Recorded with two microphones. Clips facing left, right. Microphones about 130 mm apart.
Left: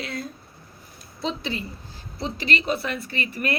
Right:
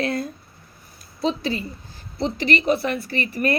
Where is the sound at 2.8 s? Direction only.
35° right (ahead or behind).